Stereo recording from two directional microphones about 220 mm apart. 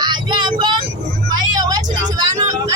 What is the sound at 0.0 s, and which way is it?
Vehicle, 20° right (ahead or behind).